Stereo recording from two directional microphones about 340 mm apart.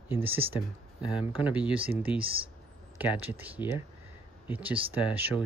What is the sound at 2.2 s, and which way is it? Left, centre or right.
Speech, centre.